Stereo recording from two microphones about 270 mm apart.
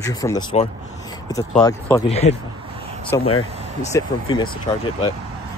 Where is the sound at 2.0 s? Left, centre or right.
Left.